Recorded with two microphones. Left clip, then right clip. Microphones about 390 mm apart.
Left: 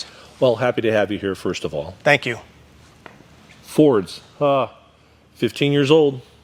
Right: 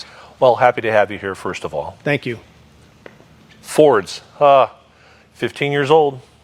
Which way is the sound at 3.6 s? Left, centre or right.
Right.